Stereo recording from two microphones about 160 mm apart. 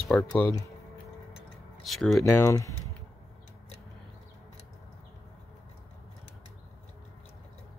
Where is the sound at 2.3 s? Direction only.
15° left (ahead or behind).